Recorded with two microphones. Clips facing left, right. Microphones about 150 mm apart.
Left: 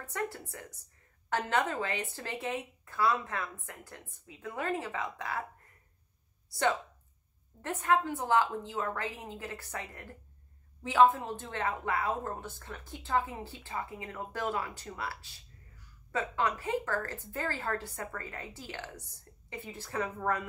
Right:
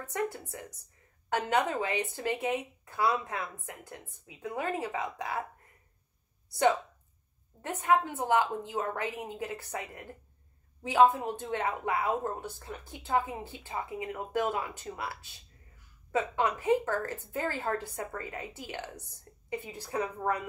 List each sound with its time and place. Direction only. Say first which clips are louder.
0.1 s speech: right 3 dB; 20° right (ahead or behind)
7.6 s speech: right 2 dB; 15° right (ahead or behind)